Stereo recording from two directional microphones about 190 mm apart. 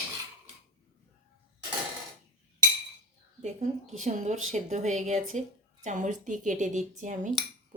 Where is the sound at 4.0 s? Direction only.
40° right (ahead or behind).